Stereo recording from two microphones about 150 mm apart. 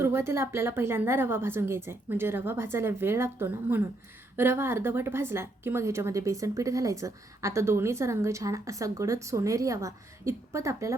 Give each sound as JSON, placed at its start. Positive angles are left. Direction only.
{"t": 0.0, "sound": "a woman's voice", "side_deg": -15}